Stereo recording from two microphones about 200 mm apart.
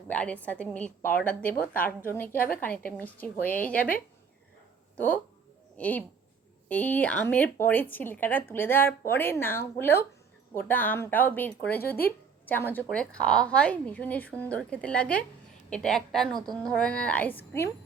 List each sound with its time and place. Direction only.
0.1 s speech: 5° left (ahead or behind)
1.5 s a woman's voice: 45° left (ahead or behind)
2.0 s speech: 10° left (ahead or behind)
4.9 s a woman's voice: 10° left (ahead or behind)